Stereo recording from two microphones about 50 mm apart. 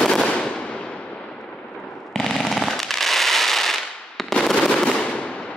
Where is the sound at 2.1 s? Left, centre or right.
Centre.